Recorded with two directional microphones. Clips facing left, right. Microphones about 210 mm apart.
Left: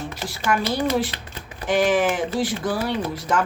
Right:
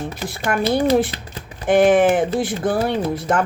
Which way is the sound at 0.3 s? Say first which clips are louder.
Right 3 dB; 55° right (ahead or behind).